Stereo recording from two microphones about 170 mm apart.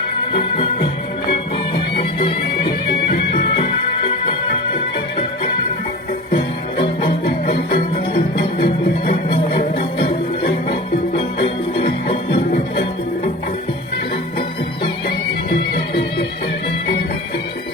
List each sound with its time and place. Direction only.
0.3 s music: 35° left (ahead or behind)
2.8 s music: 55° left (ahead or behind)
6.3 s music: 30° left (ahead or behind)
7.3 s music: 60° left (ahead or behind)
9.3 s music: 35° left (ahead or behind)